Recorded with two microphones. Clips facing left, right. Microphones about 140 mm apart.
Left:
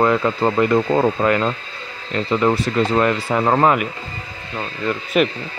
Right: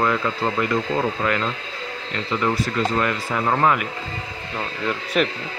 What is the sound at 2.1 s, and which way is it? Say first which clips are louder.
Speech: left 5 dB; 25° left (ahead or behind).